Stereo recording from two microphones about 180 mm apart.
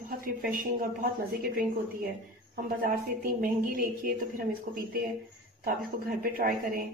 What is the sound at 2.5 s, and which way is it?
Speech, 55° right (ahead or behind).